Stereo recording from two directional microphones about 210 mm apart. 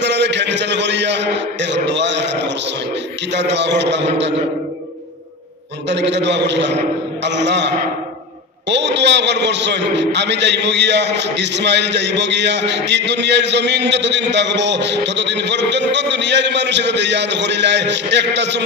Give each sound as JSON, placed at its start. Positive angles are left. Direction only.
{"t": 0.0, "sound": "a sound", "side_deg": -55}
{"t": 3.3, "sound": "a man's voice", "side_deg": -55}
{"t": 5.9, "sound": "a man's voice", "side_deg": -55}